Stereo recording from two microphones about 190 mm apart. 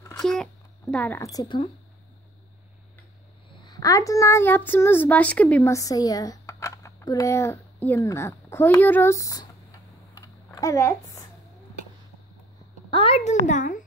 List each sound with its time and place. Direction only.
0.2 s speech: 5° left (ahead or behind); by 1.6 s 20° left (ahead or behind)
3.6 s a child's voice: 20° left (ahead or behind)
12.9 s a child's voice: 30° left (ahead or behind)